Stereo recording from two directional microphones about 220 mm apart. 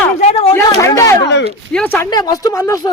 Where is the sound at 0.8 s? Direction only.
15° left (ahead or behind).